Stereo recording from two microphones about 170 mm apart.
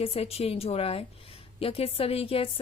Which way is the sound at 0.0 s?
35° left (ahead or behind).